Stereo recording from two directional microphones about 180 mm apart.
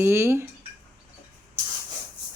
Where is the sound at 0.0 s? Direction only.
15° right (ahead or behind).